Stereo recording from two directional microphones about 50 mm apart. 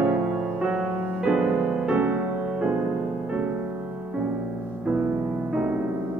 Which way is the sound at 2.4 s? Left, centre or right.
Centre.